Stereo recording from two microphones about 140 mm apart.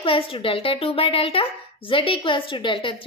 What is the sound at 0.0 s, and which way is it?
A woman's voice, 40° left (ahead or behind).